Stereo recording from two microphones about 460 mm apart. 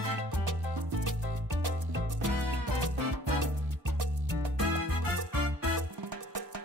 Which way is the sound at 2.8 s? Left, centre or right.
Right.